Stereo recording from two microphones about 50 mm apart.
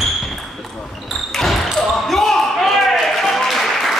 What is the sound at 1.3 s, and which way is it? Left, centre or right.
Basketball bounce, centre.